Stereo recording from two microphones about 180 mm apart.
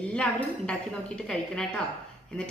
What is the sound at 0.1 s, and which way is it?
A woman's voice, 5° left (ahead or behind).